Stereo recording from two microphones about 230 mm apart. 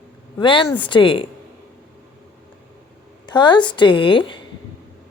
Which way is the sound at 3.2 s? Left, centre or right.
Centre.